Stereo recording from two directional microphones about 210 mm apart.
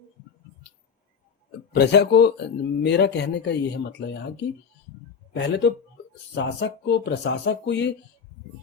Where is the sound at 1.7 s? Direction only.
55° left (ahead or behind).